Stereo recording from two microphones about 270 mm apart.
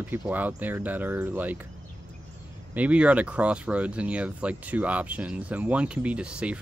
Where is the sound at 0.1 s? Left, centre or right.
Centre.